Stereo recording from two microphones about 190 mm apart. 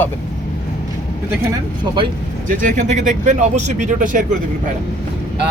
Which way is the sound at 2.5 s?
45° right (ahead or behind).